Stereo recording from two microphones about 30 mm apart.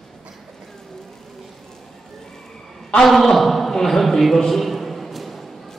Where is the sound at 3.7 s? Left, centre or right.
Centre.